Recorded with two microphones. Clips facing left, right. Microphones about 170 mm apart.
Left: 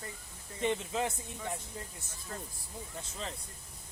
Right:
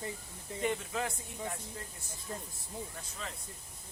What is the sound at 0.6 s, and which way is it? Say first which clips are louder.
Speech: left 2 dB; 20° left (ahead or behind).